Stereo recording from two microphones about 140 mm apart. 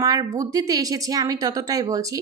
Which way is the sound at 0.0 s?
25° right (ahead or behind).